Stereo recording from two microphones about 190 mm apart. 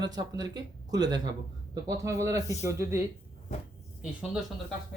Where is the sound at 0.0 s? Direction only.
20° right (ahead or behind).